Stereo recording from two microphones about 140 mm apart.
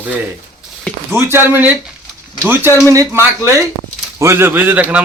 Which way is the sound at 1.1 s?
15° right (ahead or behind).